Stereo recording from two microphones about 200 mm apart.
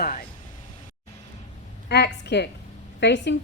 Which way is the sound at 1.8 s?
55° left (ahead or behind).